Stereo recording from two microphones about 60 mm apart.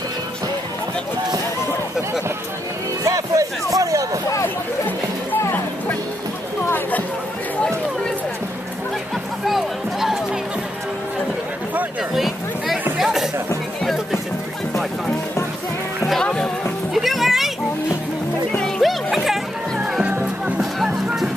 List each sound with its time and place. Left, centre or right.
3.1 s a sound: right
6.6 s a sound: left
9.5 s music: centre
12.1 s a sound: centre
12.9 s music: centre
16.2 s music: centre
16.9 s music: centre
18.6 s music: centre
20.1 s music: right